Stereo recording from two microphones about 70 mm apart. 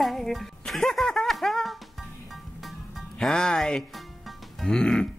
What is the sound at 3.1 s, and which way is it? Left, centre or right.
Speech, centre.